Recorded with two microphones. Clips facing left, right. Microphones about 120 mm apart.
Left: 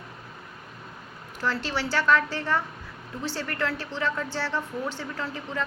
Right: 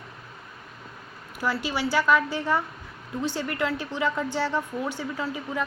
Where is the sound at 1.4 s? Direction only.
10° right (ahead or behind).